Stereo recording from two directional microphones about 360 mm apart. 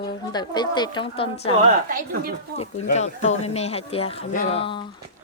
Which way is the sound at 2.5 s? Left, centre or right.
Right.